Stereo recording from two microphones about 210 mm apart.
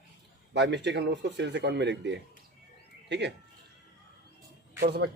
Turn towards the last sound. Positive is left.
turn(degrees=-50)  # may be behind; listen again after turning